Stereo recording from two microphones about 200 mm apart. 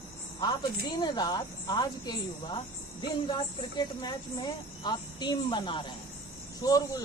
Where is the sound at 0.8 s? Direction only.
20° left (ahead or behind).